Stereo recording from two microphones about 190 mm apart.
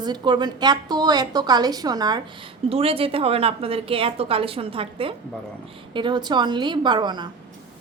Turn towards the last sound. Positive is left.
turn(degrees=-25)  # may be behind; listen again after turning